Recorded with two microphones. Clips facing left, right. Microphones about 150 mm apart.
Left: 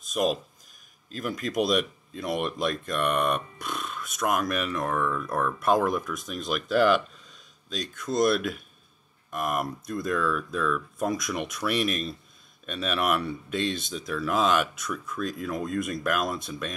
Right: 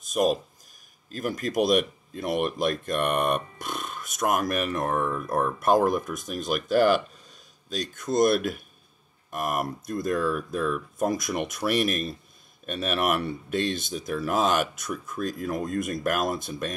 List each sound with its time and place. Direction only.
0.2 s speech: 40° right (ahead or behind)
8.0 s speech: 45° right (ahead or behind)